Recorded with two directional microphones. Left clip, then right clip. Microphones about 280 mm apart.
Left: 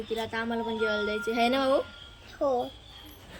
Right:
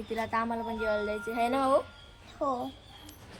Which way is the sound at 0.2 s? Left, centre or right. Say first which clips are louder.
Right 4 dB; centre.